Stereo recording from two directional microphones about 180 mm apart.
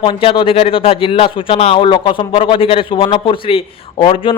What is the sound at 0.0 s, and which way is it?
A man's voice, 30° left (ahead or behind).